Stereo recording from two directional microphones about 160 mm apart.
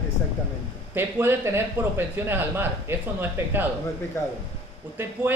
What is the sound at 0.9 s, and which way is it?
Speech, 15° right (ahead or behind).